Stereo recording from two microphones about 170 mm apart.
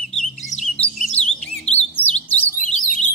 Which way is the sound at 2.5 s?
50° left (ahead or behind).